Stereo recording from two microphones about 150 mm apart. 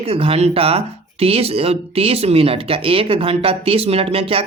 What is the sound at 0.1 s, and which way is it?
Speech, 40° right (ahead or behind).